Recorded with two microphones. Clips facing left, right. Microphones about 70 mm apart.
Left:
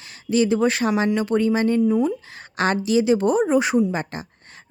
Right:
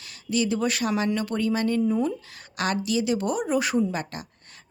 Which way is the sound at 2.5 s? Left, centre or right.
Left.